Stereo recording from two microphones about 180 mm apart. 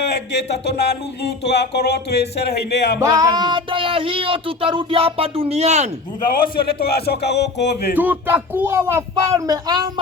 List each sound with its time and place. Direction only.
0.1 s speech: 70° left (ahead or behind)
3.0 s speech: 20° right (ahead or behind); by 5.9 s 40° right (ahead or behind)
6.6 s speech: 60° left (ahead or behind)
7.9 s speech: 10° right (ahead or behind)